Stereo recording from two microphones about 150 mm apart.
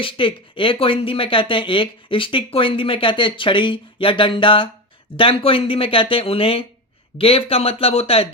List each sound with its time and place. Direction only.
0.0 s speech: 35° left (ahead or behind)